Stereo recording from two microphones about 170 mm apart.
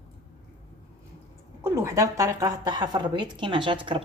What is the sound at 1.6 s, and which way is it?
Speech, 15° right (ahead or behind).